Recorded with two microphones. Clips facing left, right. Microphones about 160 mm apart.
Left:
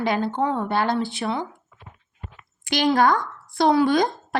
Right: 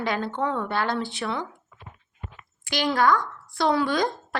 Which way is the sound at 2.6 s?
20° left (ahead or behind).